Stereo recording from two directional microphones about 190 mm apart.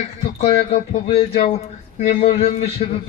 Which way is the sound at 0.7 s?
35° left (ahead or behind).